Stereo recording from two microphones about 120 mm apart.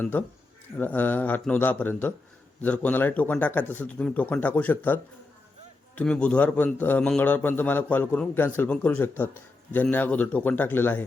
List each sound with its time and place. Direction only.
0.0 s a man's voice: 15° left (ahead or behind)
6.0 s a man's voice: 10° left (ahead or behind)